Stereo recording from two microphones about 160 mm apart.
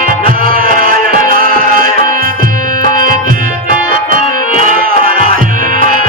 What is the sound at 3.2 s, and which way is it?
Music, 60° right (ahead or behind).